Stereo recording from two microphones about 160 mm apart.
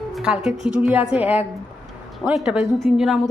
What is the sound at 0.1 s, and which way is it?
Music, 5° right (ahead or behind).